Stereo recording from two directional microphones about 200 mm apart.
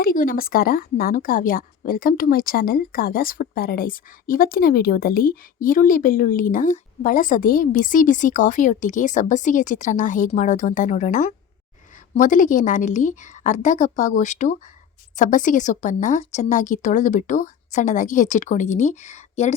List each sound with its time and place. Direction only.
0.0 s a woman's voice: 45° left (ahead or behind)